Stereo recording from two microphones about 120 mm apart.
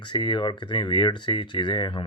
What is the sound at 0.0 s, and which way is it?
Speech, 40° left (ahead or behind).